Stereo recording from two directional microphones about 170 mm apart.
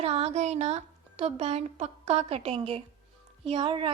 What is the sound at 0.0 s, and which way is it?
A child's voice, 35° right (ahead or behind).